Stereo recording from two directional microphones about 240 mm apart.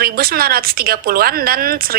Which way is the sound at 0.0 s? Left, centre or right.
Right.